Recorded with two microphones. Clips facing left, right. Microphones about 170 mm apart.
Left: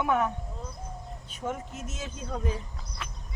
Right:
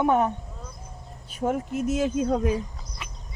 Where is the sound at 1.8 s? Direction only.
15° right (ahead or behind).